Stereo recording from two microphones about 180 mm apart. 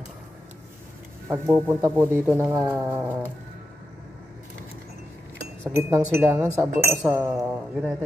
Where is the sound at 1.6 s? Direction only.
15° right (ahead or behind).